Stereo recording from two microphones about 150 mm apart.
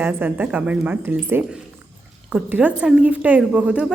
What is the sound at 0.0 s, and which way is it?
A woman's voice, 15° right (ahead or behind).